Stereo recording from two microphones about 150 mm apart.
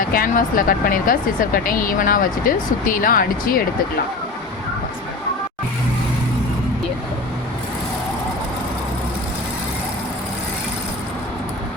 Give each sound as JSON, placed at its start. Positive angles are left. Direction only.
{"t": 0.1, "sound": "speech", "side_deg": 70}